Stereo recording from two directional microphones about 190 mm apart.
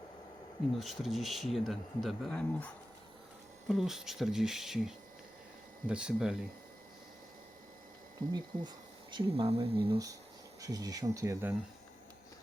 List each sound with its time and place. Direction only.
0.8 s speech: centre (ahead or behind)
3.7 s speech: centre (ahead or behind)
8.3 s speech: 20° right (ahead or behind)